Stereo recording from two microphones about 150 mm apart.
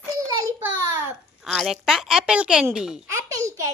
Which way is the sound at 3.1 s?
20° right (ahead or behind).